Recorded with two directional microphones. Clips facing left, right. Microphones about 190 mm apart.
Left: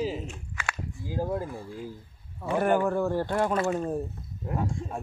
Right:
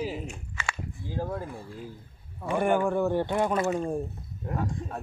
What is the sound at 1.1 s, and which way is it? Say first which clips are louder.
Speech: left 3 dB; 15° left (ahead or behind).